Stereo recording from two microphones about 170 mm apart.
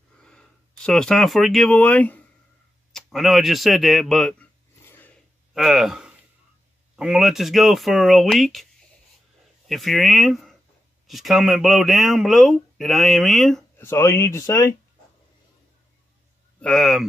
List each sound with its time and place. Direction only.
0.2 s speech: 5° left (ahead or behind)
2.9 s a sound: centre (ahead or behind)
5.5 s speech: centre (ahead or behind)
9.7 s speech: centre (ahead or behind)
13.7 s speech: 15° left (ahead or behind)
16.5 s speech: 5° left (ahead or behind)